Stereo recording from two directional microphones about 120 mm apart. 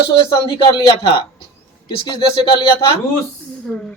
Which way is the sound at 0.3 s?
45° left (ahead or behind).